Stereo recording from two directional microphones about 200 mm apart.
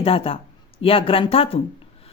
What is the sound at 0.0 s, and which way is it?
A woman's voice, 30° left (ahead or behind).